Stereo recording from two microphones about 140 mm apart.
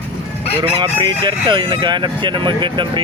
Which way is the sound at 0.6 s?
35° right (ahead or behind).